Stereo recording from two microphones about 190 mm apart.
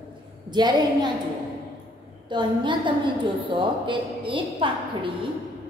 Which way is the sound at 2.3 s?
25° right (ahead or behind).